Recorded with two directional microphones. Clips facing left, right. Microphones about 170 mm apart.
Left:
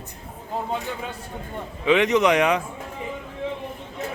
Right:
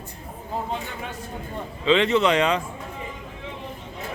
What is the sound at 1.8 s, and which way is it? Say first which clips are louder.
Speech: left 1 dB; 15° left (ahead or behind).